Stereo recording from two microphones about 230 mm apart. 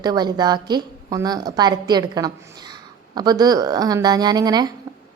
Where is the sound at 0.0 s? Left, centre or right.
Centre.